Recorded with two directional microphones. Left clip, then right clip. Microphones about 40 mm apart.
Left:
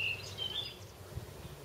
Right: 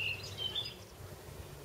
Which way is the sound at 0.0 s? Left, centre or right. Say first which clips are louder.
Left 1 dB; centre.